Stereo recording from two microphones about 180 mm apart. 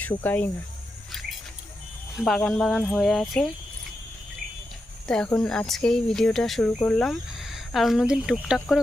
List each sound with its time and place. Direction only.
0.0 s speech: 10° left (ahead or behind)
2.1 s speech: centre (ahead or behind)
5.0 s speech: 5° left (ahead or behind)